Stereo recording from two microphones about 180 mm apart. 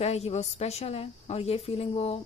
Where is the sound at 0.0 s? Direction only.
35° left (ahead or behind).